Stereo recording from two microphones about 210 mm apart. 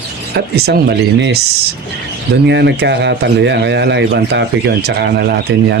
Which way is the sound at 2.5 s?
55° right (ahead or behind).